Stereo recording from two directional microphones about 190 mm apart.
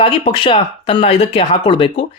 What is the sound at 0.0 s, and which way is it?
Speech, 25° left (ahead or behind).